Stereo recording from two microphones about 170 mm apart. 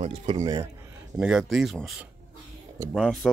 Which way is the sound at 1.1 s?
5° right (ahead or behind).